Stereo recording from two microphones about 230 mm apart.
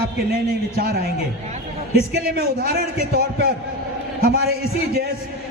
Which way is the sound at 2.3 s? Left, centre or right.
Right.